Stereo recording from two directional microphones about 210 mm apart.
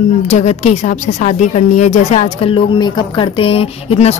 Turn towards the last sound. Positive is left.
turn(degrees=30)  # may be behind; listen again after turning